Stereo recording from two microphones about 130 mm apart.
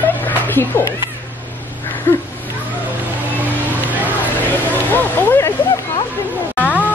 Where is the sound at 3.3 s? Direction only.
15° right (ahead or behind).